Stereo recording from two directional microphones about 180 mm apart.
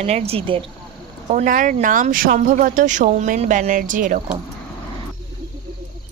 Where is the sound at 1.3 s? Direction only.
45° right (ahead or behind).